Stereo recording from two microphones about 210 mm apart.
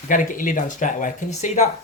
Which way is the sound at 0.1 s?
40° left (ahead or behind).